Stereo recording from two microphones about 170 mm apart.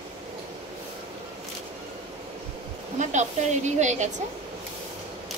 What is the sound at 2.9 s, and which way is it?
Speech, 45° right (ahead or behind).